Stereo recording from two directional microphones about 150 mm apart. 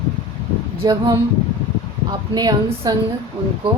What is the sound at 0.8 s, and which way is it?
Speech, 30° right (ahead or behind).